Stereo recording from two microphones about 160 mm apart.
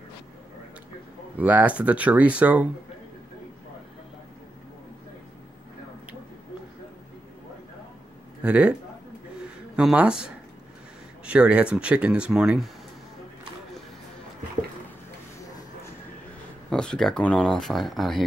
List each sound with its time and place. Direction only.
1.4 s speech: 10° right (ahead or behind)
8.4 s speech: 10° right (ahead or behind)
9.8 s speech: 5° right (ahead or behind)
16.7 s speech: 5° left (ahead or behind)